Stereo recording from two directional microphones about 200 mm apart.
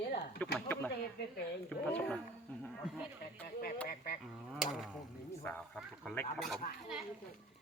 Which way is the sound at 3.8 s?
50° left (ahead or behind).